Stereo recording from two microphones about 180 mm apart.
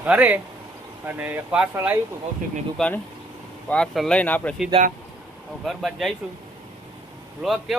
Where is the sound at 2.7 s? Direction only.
5° left (ahead or behind).